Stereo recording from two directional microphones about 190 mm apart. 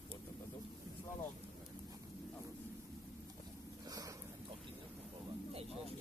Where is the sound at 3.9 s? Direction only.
20° right (ahead or behind).